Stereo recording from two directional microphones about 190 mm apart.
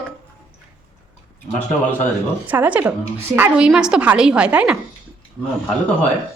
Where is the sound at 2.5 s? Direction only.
10° right (ahead or behind).